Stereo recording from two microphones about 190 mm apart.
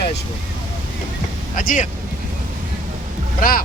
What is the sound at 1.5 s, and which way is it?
Speech, 45° left (ahead or behind).